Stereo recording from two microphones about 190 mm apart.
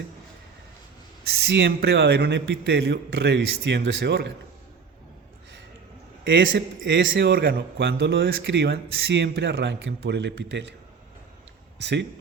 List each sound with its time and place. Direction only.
1.2 s speech: 60° right (ahead or behind)
6.2 s a man's voice: 80° right; by 10.8 s 65° right (ahead or behind)
11.8 s speech: 65° right (ahead or behind)